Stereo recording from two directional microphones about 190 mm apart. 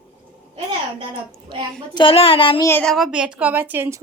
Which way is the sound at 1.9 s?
30° left (ahead or behind).